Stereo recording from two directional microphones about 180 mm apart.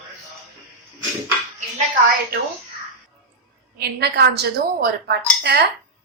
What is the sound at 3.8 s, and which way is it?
A woman's voice, 65° right (ahead or behind).